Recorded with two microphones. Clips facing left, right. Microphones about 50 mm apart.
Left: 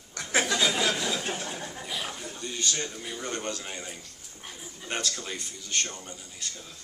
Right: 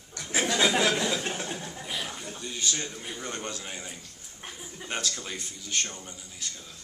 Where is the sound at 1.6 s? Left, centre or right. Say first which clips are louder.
Even; centre.